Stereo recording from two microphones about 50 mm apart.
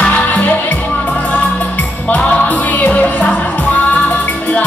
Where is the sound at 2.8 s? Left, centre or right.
Left.